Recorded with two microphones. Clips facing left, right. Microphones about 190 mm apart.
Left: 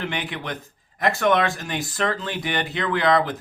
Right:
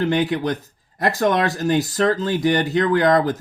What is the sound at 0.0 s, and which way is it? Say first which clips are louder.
Speech: right 10 dB; 40° right (ahead or behind).